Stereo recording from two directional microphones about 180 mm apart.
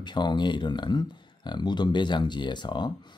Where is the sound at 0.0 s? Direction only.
25° left (ahead or behind).